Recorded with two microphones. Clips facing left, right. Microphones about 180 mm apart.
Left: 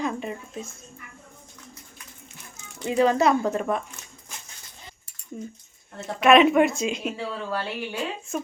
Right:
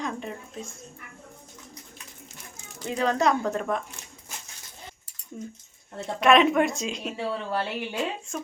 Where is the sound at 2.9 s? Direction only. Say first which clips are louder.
Left 4 dB; 5° left (ahead or behind).